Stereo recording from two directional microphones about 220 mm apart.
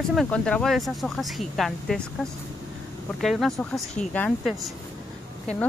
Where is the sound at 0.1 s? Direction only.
Centre (ahead or behind).